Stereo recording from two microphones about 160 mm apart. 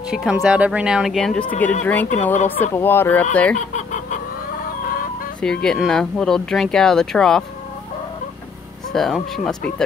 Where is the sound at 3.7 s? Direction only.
50° left (ahead or behind).